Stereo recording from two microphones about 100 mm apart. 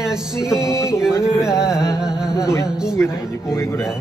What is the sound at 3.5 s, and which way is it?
Speech, 25° left (ahead or behind).